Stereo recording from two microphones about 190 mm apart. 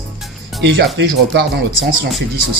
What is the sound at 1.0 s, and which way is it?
Speech, 65° right (ahead or behind).